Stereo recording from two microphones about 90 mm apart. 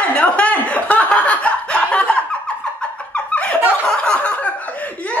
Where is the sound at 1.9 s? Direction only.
15° left (ahead or behind).